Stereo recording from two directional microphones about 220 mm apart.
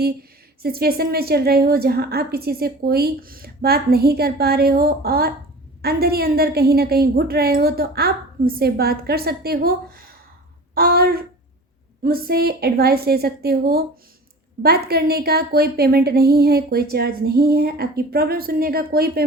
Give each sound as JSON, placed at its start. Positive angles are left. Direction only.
{"t": 0.0, "sound": "a woman's voice", "side_deg": -45}